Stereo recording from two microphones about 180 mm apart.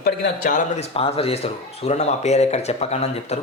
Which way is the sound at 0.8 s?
35° left (ahead or behind).